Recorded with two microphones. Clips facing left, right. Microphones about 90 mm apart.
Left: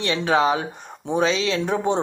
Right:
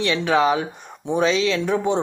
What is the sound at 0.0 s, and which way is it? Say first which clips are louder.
Speech: right 1 dB; 35° left (ahead or behind).